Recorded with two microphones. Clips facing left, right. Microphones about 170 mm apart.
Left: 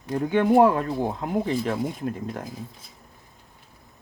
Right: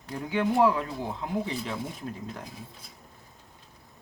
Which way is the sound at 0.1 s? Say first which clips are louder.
Left 8 dB; 50° left (ahead or behind).